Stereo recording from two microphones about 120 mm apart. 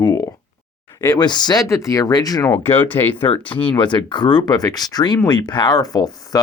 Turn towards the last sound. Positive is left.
turn(degrees=30)  # may be behind; listen again after turning